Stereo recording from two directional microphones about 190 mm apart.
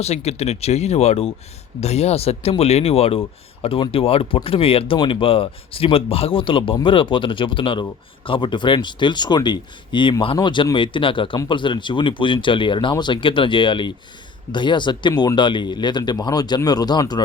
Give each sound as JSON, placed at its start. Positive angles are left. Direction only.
{"t": 0.0, "sound": "speech", "side_deg": 35}